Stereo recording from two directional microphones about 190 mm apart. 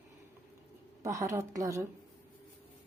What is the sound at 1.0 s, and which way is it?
Speech, 15° right (ahead or behind).